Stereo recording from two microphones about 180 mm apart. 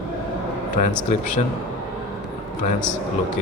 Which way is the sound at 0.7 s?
45° left (ahead or behind).